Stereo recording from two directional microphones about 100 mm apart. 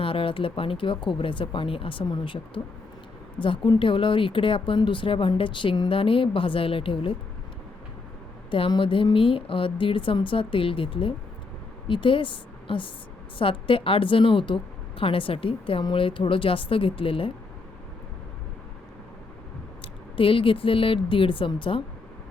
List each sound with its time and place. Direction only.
0.0 s speech: 65° left (ahead or behind)
5.9 s speech: 65° left (ahead or behind)
8.4 s a woman's voice: 65° left (ahead or behind)
19.8 s speech: 65° left (ahead or behind)